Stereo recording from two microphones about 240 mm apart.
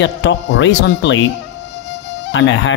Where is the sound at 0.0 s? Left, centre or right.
Left.